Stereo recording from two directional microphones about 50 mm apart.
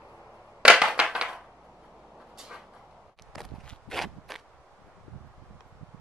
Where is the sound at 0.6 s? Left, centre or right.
Centre.